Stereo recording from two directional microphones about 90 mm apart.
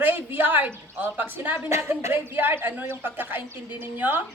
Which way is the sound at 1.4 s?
30° right (ahead or behind).